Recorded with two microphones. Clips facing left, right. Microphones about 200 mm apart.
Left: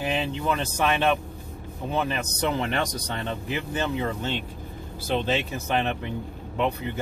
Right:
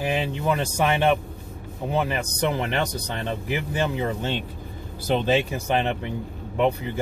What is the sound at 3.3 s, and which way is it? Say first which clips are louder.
Speech: right 4 dB; 15° right (ahead or behind).